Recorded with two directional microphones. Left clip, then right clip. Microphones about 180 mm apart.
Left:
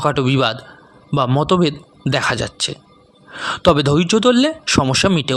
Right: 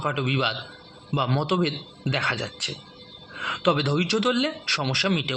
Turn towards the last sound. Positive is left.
turn(degrees=65)  # may be behind; listen again after turning